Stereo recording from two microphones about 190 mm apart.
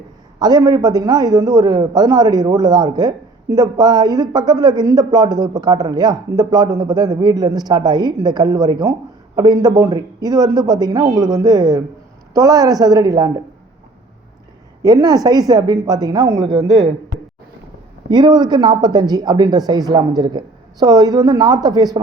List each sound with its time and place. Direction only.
0.3 s a man's voice: 20° right (ahead or behind)
14.8 s a man's voice: 20° right (ahead or behind)
18.1 s a man's voice: 25° right (ahead or behind)